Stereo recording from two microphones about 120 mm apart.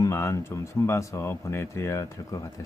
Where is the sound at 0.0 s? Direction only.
25° left (ahead or behind).